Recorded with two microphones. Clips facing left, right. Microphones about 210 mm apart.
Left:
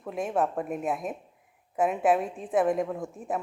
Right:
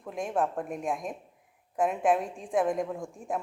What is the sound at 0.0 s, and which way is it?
A woman's voice, 5° left (ahead or behind).